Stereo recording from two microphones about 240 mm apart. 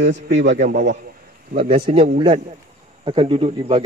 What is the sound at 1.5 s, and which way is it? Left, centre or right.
Speech, right.